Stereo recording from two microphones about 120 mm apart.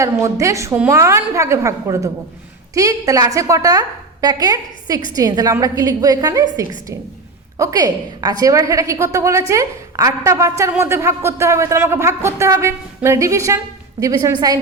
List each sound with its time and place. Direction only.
0.0 s a woman's voice: 25° right (ahead or behind)